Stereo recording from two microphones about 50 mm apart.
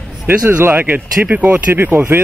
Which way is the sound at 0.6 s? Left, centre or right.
Right.